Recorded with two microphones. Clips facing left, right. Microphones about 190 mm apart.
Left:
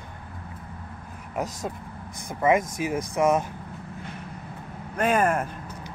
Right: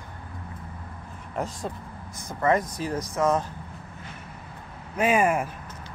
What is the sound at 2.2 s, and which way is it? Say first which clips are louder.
Speech: left 2 dB; 10° left (ahead or behind).